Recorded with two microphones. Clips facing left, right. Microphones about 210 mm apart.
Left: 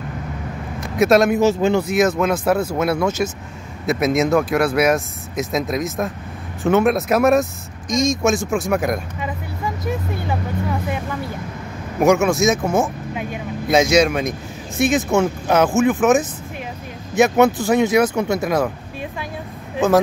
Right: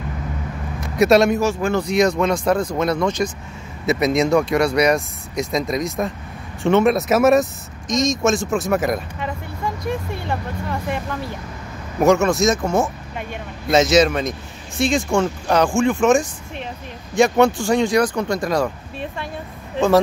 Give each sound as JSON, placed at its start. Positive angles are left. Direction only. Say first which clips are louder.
{"t": 0.9, "sound": "speech", "louder": "even", "side_deg": 0}
{"t": 1.4, "sound": "speech", "louder": "left 4 dB", "side_deg": 20}
{"t": 1.8, "sound": "speech", "louder": "even", "side_deg": 5}